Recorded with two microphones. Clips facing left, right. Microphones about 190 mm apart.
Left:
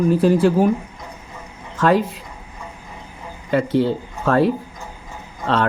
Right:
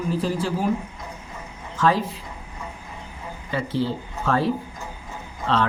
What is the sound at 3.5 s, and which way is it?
Speech, 60° left (ahead or behind).